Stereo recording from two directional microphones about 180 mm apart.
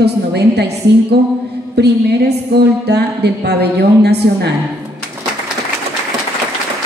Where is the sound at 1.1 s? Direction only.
65° right (ahead or behind).